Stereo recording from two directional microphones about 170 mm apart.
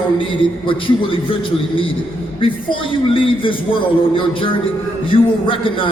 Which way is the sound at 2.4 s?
30° left (ahead or behind).